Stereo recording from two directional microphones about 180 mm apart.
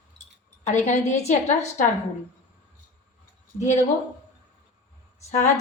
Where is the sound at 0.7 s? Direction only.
40° left (ahead or behind).